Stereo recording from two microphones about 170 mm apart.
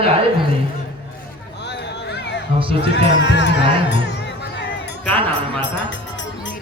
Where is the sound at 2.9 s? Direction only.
90° left.